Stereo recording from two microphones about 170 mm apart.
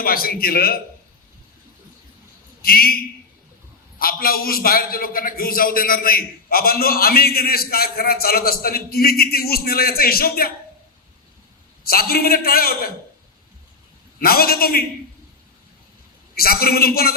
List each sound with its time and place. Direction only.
0.0 s a man's voice: 60° left (ahead or behind)
2.6 s a man's voice: 60° left (ahead or behind)
11.8 s a man's voice: 60° left (ahead or behind)
14.2 s a man's voice: 60° left (ahead or behind)
16.3 s a man's voice: 65° left (ahead or behind)